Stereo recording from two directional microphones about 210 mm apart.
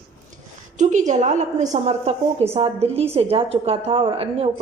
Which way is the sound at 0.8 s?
35° right (ahead or behind).